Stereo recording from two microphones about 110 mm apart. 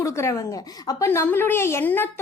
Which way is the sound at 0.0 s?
25° left (ahead or behind).